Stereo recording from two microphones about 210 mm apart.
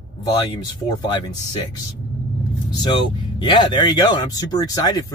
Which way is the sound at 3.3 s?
20° left (ahead or behind).